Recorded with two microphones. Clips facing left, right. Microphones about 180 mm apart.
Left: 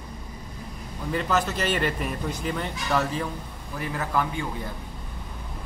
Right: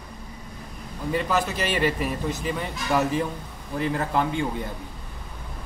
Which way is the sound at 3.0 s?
20° right (ahead or behind).